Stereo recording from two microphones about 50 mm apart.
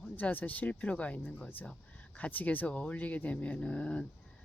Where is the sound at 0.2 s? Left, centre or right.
Left.